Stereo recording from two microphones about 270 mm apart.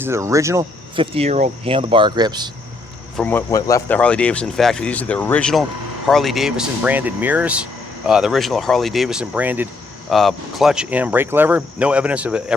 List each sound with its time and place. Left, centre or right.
0.0 s speech: centre
3.2 s speech: centre